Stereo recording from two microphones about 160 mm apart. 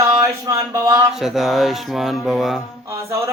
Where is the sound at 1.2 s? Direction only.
Centre (ahead or behind).